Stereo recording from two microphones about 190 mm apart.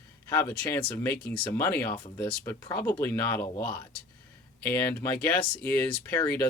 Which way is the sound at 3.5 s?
25° left (ahead or behind).